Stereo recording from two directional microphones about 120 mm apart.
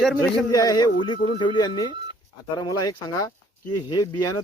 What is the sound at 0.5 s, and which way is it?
Speech, 30° left (ahead or behind).